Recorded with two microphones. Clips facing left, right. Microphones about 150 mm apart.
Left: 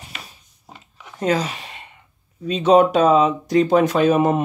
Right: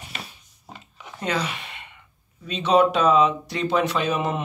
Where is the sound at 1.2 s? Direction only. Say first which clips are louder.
Left 6 dB; 40° left (ahead or behind).